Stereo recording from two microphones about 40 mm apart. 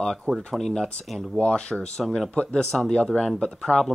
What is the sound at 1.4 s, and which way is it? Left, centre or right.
Speech, left.